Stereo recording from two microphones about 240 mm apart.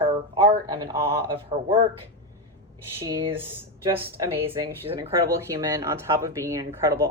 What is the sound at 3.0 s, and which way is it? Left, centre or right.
Speech, centre.